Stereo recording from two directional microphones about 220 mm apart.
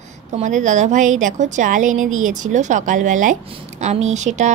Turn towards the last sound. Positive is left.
turn(degrees=-30)  # may be behind; listen again after turning